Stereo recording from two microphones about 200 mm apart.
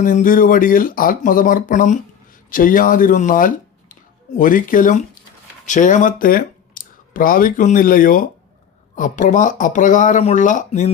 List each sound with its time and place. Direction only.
0.0 s speech: 40° left (ahead or behind)